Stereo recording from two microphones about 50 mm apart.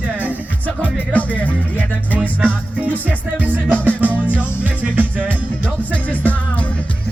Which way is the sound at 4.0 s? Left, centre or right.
Right.